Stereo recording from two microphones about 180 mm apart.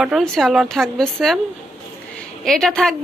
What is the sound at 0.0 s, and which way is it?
A woman's voice, centre (ahead or behind).